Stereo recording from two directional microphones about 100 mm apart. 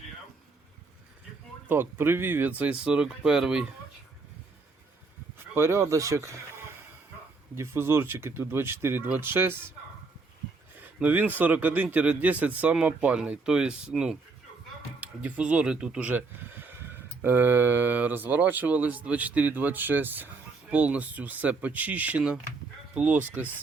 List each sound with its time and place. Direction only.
1.6 s speech: 20° right (ahead or behind)
5.5 s speech: 25° right (ahead or behind)
7.5 s speech: 25° right (ahead or behind)
10.8 s speech: 15° right (ahead or behind)
15.2 s speech: 15° right (ahead or behind)